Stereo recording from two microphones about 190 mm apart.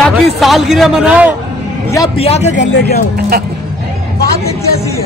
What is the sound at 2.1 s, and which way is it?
Speech, 30° left (ahead or behind).